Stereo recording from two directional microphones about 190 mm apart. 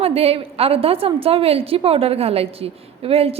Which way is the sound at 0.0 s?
30° right (ahead or behind).